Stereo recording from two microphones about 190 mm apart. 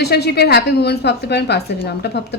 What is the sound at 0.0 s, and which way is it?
A woman's voice, 60° left (ahead or behind).